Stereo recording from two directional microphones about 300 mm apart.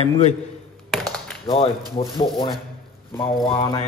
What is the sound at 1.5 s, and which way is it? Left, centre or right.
Speech, centre.